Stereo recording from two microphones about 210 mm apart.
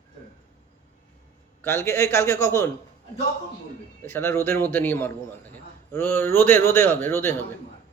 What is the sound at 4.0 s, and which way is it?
A man's voice, 10° left (ahead or behind).